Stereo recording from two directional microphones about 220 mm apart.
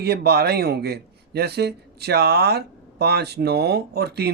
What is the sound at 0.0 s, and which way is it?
Speech, 45° right (ahead or behind).